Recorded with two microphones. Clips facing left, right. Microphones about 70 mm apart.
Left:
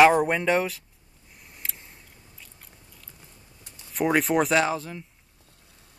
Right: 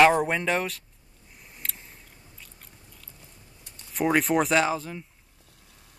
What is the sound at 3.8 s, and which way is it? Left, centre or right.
Speech, centre.